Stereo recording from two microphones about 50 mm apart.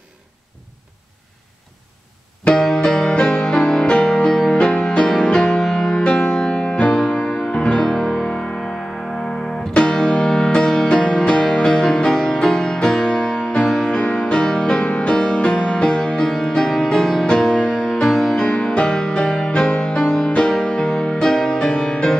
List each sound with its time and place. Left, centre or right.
2.4 s music: centre
21.3 s music: centre
21.5 s music: centre